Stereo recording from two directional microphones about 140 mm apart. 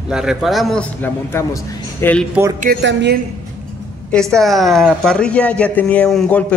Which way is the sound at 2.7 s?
90° right.